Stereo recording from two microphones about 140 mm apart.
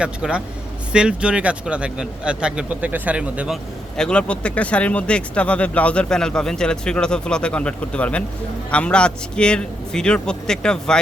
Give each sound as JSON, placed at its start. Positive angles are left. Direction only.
{"t": 0.0, "sound": "a man's voice", "side_deg": -5}
{"t": 3.9, "sound": "a man's voice", "side_deg": 5}